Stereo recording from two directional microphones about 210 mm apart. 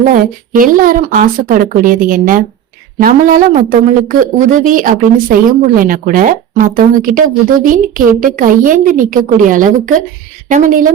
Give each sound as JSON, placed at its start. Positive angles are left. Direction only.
{"t": 0.1, "sound": "a woman's voice", "side_deg": -40}